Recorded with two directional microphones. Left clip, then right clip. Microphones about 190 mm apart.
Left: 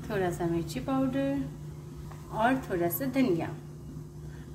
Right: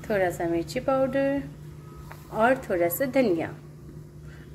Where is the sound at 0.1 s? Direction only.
40° right (ahead or behind).